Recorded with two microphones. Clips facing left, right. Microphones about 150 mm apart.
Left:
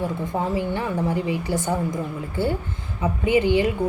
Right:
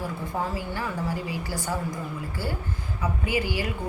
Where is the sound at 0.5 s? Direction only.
20° left (ahead or behind).